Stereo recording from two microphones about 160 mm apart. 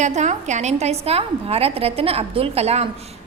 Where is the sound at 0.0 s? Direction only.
50° right (ahead or behind).